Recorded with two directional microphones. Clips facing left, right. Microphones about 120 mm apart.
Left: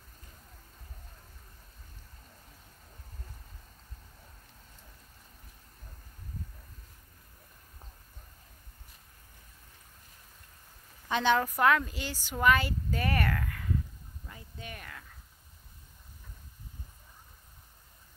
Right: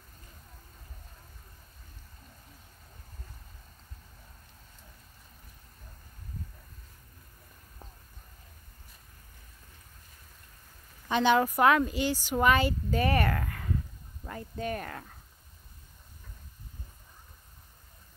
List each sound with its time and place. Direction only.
11.1 s a woman's voice: centre (ahead or behind)
11.3 s speech: 15° right (ahead or behind); by 13.7 s 35° right (ahead or behind)
14.2 s a sound: 65° right (ahead or behind)
14.6 s speech: 45° right (ahead or behind)